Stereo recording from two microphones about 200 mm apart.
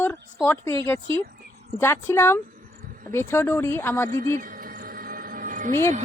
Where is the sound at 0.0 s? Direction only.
10° left (ahead or behind).